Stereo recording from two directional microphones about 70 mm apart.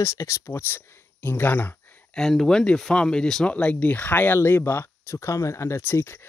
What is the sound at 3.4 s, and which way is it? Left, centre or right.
Speech, centre.